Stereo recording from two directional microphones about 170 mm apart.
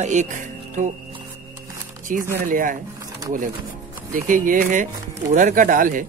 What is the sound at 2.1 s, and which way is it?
Speech, 50° right (ahead or behind).